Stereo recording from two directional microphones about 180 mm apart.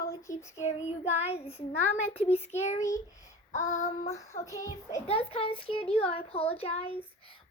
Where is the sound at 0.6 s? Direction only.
35° left (ahead or behind).